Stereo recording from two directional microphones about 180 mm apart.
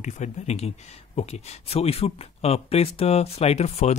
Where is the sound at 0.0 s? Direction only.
40° left (ahead or behind).